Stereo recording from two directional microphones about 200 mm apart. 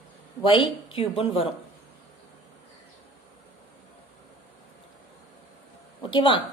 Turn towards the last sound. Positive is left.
turn(degrees=25)  # may be behind; listen again after turning